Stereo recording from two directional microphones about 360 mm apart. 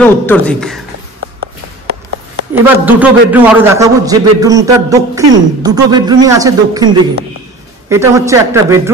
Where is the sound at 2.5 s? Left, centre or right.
Centre.